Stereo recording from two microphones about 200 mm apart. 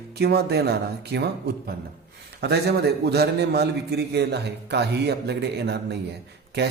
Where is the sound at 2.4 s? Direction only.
55° right (ahead or behind).